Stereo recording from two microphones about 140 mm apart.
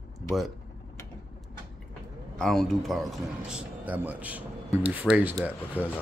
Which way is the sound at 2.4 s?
5° left (ahead or behind).